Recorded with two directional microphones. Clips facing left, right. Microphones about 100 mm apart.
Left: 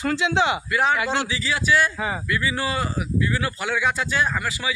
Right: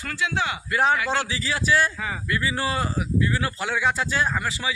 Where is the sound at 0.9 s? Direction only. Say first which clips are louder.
Left 1 dB; 25° left (ahead or behind).